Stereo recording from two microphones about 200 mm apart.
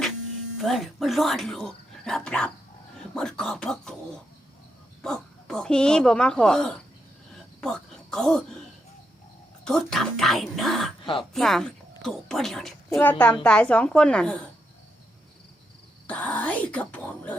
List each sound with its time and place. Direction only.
0.5 s a woman's voice: centre (ahead or behind)
5.0 s a woman's voice: centre (ahead or behind)
9.6 s a woman's voice: centre (ahead or behind)
11.0 s speech: 25° left (ahead or behind)
11.3 s a woman's voice: centre (ahead or behind)
16.0 s speech: 5° left (ahead or behind)